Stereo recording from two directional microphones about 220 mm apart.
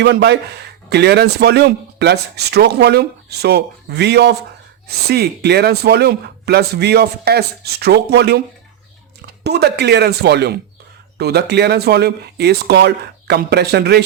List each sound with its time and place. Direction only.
0.0 s speech: 50° right (ahead or behind)
9.4 s speech: 50° right (ahead or behind)